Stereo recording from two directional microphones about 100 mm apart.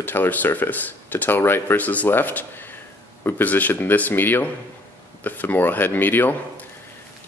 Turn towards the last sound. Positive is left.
turn(degrees=20)  # may be behind; listen again after turning